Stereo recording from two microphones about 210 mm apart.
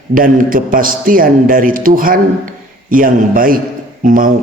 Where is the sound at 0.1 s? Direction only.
40° right (ahead or behind).